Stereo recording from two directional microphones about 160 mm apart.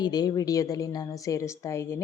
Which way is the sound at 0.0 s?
25° left (ahead or behind).